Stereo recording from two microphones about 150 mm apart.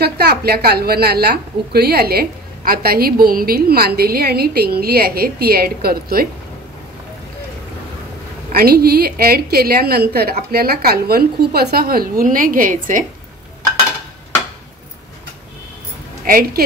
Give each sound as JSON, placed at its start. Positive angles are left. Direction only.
{"t": 0.0, "sound": "a woman's voice", "side_deg": -90}
{"t": 8.5, "sound": "a woman's voice", "side_deg": -85}
{"t": 16.3, "sound": "a woman's voice", "side_deg": -70}